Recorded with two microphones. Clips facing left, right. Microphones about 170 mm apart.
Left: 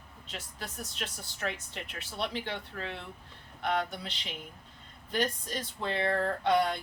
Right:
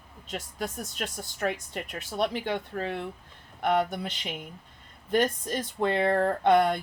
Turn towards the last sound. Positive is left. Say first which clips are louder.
# right 5 dB
turn(degrees=-55)  # may be behind; listen again after turning